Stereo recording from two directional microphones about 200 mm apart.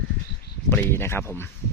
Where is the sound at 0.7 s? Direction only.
10° left (ahead or behind).